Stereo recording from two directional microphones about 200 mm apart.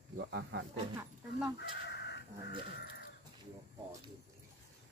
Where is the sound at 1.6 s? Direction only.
55° left (ahead or behind).